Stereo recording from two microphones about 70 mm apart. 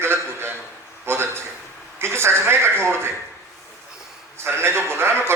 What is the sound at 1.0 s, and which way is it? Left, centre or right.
A man's voice, right.